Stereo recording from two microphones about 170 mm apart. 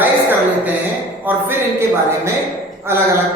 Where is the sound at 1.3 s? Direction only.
10° right (ahead or behind).